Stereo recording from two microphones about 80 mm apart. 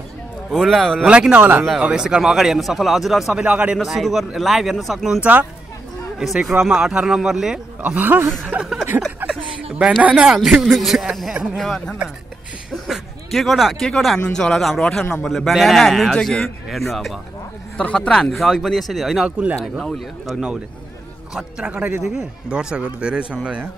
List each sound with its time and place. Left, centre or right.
0.5 s speech: centre
1.0 s speech: centre
3.4 s speech: centre
3.7 s speech: centre
5.2 s speech: centre
6.1 s speech: centre
7.8 s speech: right
9.3 s a sound: centre
10.0 s speech: centre
10.6 s speech: centre
17.7 s speech: centre
21.4 s speech: centre
22.0 s speech: centre